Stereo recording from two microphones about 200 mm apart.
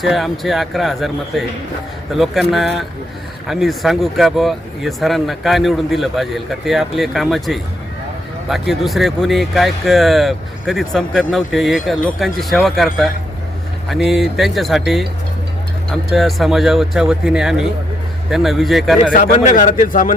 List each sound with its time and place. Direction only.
0.0 s speech: centre (ahead or behind)
19.1 s a man's voice: 40° left (ahead or behind)